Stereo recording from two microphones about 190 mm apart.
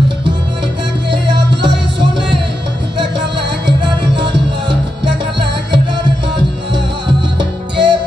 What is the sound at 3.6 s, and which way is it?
Music, 65° right (ahead or behind).